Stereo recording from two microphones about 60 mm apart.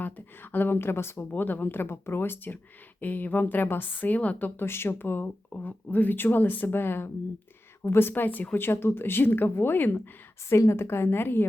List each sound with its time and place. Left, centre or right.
0.0 s speech: left
1.2 s speech: left
4.6 s speech: left